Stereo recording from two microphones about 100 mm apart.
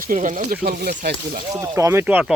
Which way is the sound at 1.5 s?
35° right (ahead or behind).